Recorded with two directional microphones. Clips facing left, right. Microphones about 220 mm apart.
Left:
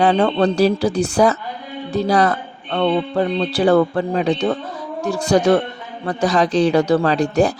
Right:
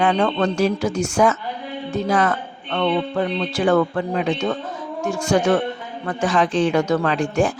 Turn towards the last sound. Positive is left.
turn(degrees=40)  # may be behind; listen again after turning